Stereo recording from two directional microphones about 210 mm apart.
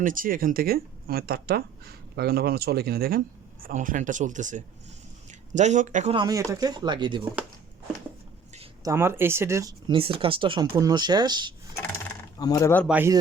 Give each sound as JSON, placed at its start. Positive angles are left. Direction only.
{"t": 0.0, "sound": "speech", "side_deg": -40}
{"t": 6.1, "sound": "speech", "side_deg": -15}
{"t": 8.8, "sound": "speech", "side_deg": -15}
{"t": 12.4, "sound": "speech", "side_deg": 15}
{"t": 12.9, "sound": "speech", "side_deg": -10}